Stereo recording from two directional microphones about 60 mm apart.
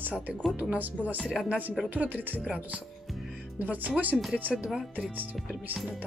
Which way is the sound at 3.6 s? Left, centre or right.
Right.